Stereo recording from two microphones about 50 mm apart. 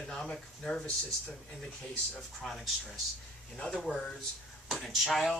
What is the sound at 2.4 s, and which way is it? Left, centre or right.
Speech, centre.